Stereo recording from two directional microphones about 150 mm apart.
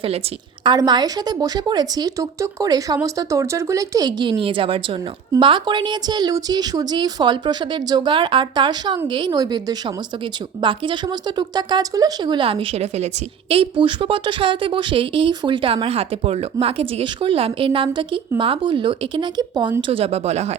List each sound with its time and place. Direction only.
0.6 s a woman's voice: 30° right (ahead or behind)
19.9 s speech: 40° right (ahead or behind)